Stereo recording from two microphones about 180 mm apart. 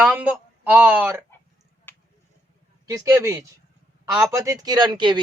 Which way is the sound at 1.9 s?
10° left (ahead or behind).